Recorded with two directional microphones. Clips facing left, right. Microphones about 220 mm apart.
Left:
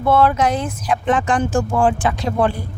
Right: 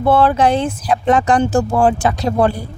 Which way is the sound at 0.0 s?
30° right (ahead or behind).